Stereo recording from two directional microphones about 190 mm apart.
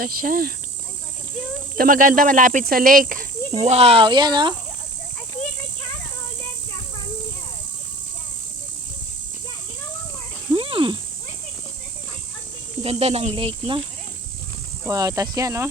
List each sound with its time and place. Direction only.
0.0 s speech: 50° right (ahead or behind)
1.7 s speech: 45° right (ahead or behind); by 4.5 s 25° right (ahead or behind)
10.5 s a sound: 30° right (ahead or behind)
12.8 s speech: 30° right (ahead or behind)
14.8 s speech: 20° right (ahead or behind)